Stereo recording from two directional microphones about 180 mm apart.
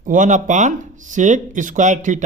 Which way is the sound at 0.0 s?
45° right (ahead or behind).